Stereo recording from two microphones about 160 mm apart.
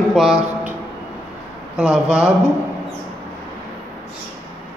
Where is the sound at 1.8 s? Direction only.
5° right (ahead or behind).